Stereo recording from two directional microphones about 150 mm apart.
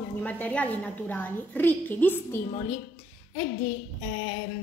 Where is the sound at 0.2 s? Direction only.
10° left (ahead or behind).